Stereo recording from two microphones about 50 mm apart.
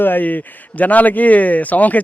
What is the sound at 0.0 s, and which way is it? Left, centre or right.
A man's voice, left.